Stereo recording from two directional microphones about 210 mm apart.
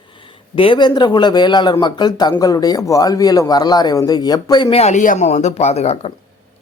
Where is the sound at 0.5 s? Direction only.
25° left (ahead or behind).